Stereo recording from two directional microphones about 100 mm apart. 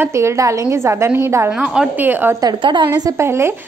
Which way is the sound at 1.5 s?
10° right (ahead or behind).